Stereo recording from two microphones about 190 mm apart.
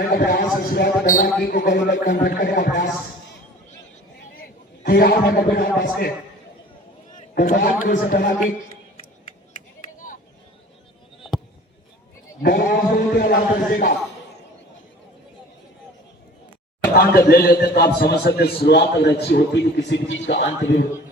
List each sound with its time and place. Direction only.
0.0 s a man's voice: 50° left (ahead or behind)
1.6 s a man's voice: 65° left (ahead or behind)
2.0 s a man's voice: 50° left (ahead or behind)
4.4 s a man's voice: 55° left (ahead or behind)
7.3 s a man's voice: 45° left (ahead or behind)
12.4 s a man's voice: 55° left (ahead or behind)
17.0 s a man's voice: 50° left (ahead or behind); by 20.8 s 70° left (ahead or behind)